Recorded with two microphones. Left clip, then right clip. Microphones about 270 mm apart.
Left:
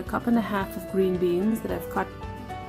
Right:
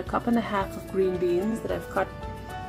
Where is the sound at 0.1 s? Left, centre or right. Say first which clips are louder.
Even; left.